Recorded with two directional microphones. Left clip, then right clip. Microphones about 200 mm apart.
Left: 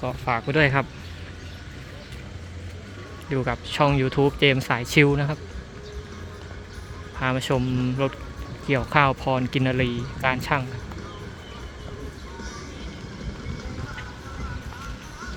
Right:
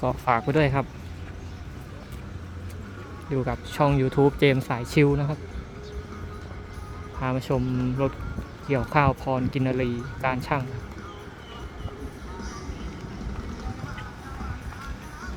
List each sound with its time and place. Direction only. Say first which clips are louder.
0.0 s speech: right 2 dB; 25° right (ahead or behind)
0.5 s speech: left 3 dB; 5° right (ahead or behind)
3.2 s speech: left 2 dB; centre (ahead or behind)
7.2 s speech: left 3 dB; centre (ahead or behind)
8.6 s speech: left 3 dB; 5° right (ahead or behind)